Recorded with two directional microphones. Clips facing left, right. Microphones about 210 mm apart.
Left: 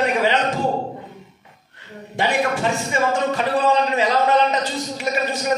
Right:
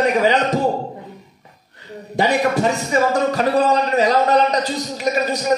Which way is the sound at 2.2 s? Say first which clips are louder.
Right 4 dB; 40° right (ahead or behind).